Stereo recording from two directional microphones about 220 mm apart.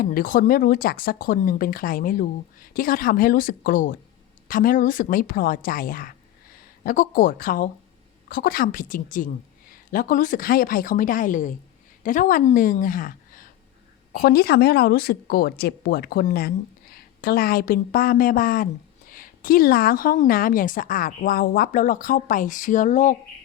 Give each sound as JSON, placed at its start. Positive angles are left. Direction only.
{"t": 0.0, "sound": "a woman's voice", "side_deg": 40}